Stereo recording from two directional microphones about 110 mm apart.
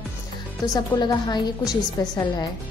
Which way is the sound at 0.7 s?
40° left (ahead or behind).